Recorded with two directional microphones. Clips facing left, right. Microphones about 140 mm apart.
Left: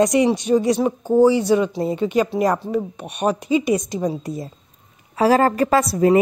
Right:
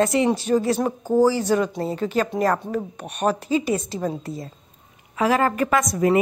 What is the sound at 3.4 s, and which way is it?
Speech, 35° right (ahead or behind).